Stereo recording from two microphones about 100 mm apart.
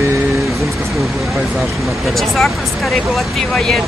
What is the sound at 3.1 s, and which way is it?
Speech, 5° left (ahead or behind).